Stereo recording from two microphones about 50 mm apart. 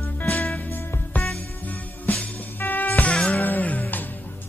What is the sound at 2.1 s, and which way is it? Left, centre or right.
Music, left.